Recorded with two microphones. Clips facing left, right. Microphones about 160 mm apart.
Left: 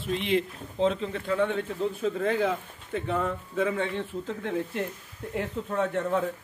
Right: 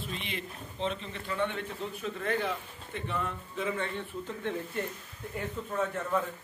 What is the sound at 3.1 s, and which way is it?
Speech, 90° left.